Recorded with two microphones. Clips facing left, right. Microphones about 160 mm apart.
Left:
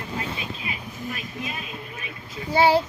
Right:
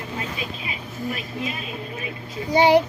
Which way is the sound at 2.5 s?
20° right (ahead or behind).